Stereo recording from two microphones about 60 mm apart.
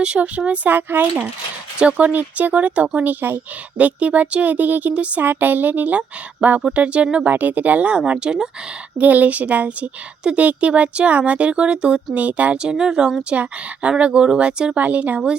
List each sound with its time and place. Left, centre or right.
0.0 s speech: right
12.7 s speech: centre
13.3 s speech: right